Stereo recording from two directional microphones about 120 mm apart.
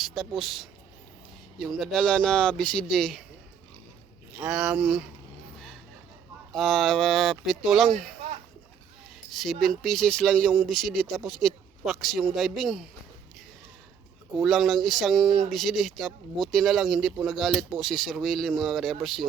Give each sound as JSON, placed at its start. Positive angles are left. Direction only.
{"t": 0.0, "sound": "speech", "side_deg": 0}
{"t": 4.3, "sound": "speech", "side_deg": -10}
{"t": 6.5, "sound": "speech", "side_deg": 0}
{"t": 9.3, "sound": "speech", "side_deg": 0}
{"t": 14.4, "sound": "speech", "side_deg": 0}